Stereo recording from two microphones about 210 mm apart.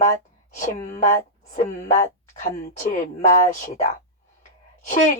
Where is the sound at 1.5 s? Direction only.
35° left (ahead or behind).